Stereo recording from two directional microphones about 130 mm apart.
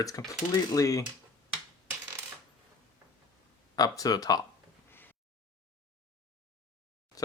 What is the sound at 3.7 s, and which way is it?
Speech, 30° left (ahead or behind).